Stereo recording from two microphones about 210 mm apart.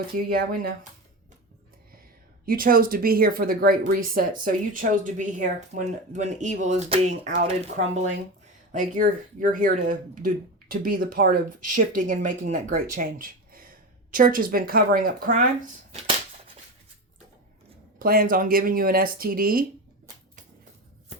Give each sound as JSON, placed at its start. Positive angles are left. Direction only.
{"t": 0.2, "sound": "speech", "side_deg": -45}
{"t": 2.5, "sound": "speech", "side_deg": -45}
{"t": 18.0, "sound": "speech", "side_deg": -45}